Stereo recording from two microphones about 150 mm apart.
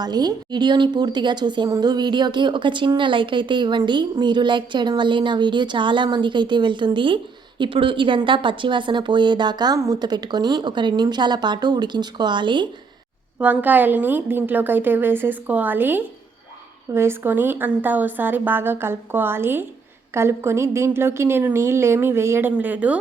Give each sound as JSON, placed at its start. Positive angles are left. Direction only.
{"t": 0.0, "sound": "a woman's voice", "side_deg": -25}
{"t": 13.4, "sound": "a woman's voice", "side_deg": -10}